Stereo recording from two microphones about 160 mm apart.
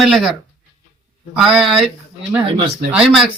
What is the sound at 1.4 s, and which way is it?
Speech, centre (ahead or behind).